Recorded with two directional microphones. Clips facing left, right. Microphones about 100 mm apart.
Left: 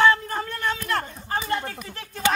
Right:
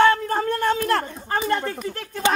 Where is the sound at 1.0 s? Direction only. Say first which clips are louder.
Right 4 dB; 50° right (ahead or behind).